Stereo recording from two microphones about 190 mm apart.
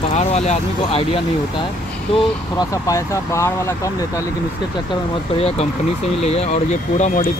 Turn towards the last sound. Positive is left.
turn(degrees=40)  # may be behind; listen again after turning